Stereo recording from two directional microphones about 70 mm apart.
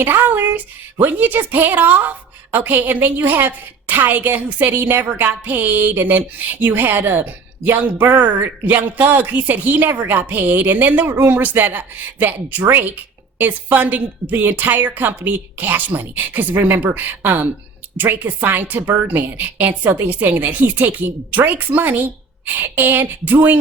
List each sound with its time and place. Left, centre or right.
0.0 s speech: right